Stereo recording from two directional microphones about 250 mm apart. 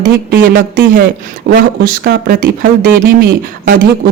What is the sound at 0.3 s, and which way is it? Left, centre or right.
A woman's voice, right.